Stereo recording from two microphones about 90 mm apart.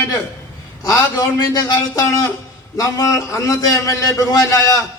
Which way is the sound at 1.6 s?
40° left (ahead or behind).